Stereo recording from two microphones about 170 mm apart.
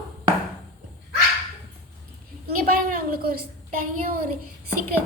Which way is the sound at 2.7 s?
60° right (ahead or behind).